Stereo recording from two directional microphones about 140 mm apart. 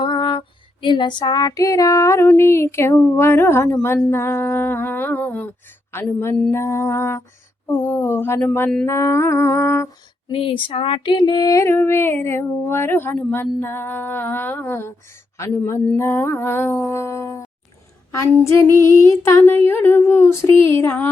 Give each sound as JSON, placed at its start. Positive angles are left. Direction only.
{"t": 0.0, "sound": "female singing", "side_deg": 35}
{"t": 6.5, "sound": "lullaby", "side_deg": 20}
{"t": 7.7, "sound": "female singing", "side_deg": 15}
{"t": 8.9, "sound": "lullaby", "side_deg": 20}
{"t": 10.3, "sound": "female singing", "side_deg": 40}
{"t": 15.4, "sound": "lullaby", "side_deg": 20}
{"t": 16.0, "sound": "female singing", "side_deg": 15}
{"t": 18.1, "sound": "lullaby", "side_deg": 20}
{"t": 18.8, "sound": "female singing", "side_deg": 20}